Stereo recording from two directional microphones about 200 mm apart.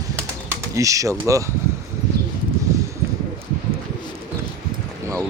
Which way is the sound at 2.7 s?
15° right (ahead or behind).